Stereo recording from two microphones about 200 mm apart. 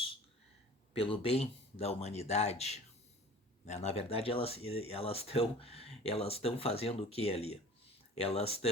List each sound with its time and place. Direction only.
0.9 s speech: 30° left (ahead or behind)